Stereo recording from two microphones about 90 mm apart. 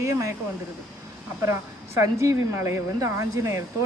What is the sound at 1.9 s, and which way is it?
Speech, 35° right (ahead or behind).